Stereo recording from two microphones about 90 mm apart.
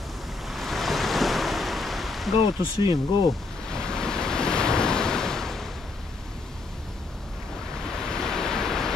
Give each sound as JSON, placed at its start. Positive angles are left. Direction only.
{"t": 0.5, "sound": "waves", "side_deg": 0}
{"t": 2.8, "sound": "speech", "side_deg": 65}
{"t": 3.7, "sound": "waves", "side_deg": 10}
{"t": 8.1, "sound": "waves", "side_deg": 5}